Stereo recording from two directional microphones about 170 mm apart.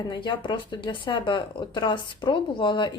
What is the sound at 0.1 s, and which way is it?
Speech, 25° left (ahead or behind).